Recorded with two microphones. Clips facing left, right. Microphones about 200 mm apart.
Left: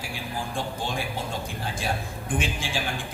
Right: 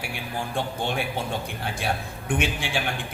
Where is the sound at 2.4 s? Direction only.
65° right (ahead or behind).